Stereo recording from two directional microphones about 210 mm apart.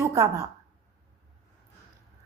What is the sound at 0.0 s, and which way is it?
Speech, 15° right (ahead or behind).